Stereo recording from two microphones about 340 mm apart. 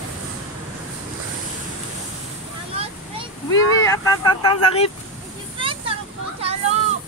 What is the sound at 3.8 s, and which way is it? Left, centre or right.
Speech, centre.